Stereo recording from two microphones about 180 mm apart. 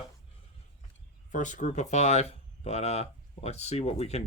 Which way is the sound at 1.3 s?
45° left (ahead or behind).